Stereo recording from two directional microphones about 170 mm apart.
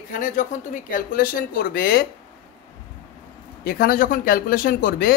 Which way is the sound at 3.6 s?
60° left (ahead or behind).